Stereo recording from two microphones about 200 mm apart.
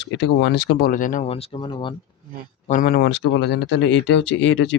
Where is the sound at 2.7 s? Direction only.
45° left (ahead or behind).